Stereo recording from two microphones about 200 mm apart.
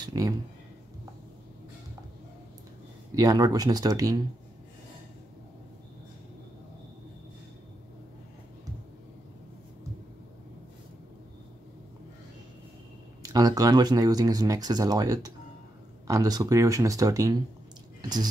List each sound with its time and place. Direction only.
0.0 s a sound: 15° right (ahead or behind)
3.2 s speech: 20° right (ahead or behind)
13.2 s speech: 20° right (ahead or behind)